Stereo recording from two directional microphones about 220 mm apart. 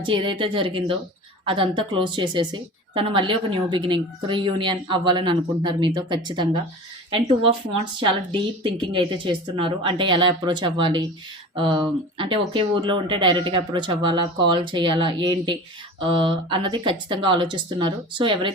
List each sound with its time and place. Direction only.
0.0 s a woman's voice: 25° right (ahead or behind)
8.0 s a woman's voice: 20° right (ahead or behind)